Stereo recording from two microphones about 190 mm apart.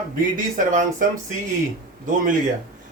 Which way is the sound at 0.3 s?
45° right (ahead or behind).